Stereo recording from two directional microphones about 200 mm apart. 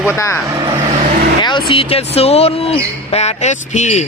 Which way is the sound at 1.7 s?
30° left (ahead or behind).